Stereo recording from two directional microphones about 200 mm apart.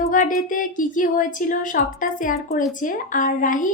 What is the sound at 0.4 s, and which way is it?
A woman's voice, 45° left (ahead or behind).